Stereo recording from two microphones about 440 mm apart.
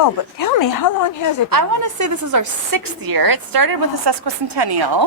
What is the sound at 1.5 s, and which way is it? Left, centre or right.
A woman's voice, right.